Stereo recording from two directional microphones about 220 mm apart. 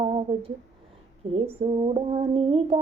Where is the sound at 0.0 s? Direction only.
25° right (ahead or behind).